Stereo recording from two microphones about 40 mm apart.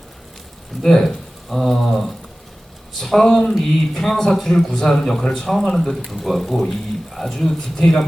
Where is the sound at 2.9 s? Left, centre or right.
Centre.